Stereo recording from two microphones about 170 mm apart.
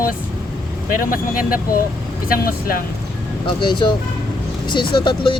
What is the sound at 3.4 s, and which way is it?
Speech, 30° left (ahead or behind).